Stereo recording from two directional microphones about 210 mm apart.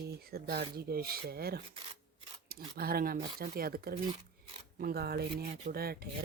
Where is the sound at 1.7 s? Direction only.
25° right (ahead or behind).